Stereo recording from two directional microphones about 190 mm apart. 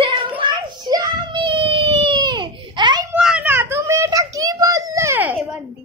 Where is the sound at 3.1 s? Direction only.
5° right (ahead or behind).